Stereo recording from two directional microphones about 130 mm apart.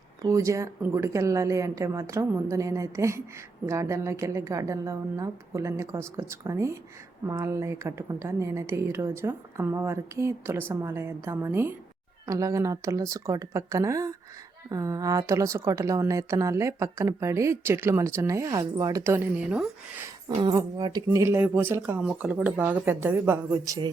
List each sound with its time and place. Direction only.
0.2 s speech: 25° right (ahead or behind)
20.2 s speech: 35° right (ahead or behind); by 23.4 s 15° right (ahead or behind)
23.6 s speech: 25° right (ahead or behind)